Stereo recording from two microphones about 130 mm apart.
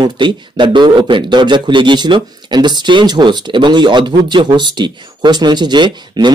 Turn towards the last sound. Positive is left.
turn(degrees=-35)  # may be behind; listen again after turning